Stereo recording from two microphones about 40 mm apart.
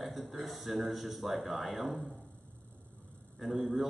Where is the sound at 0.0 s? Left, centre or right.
Centre.